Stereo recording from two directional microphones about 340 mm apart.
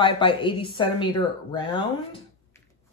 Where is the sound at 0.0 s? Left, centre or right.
Centre.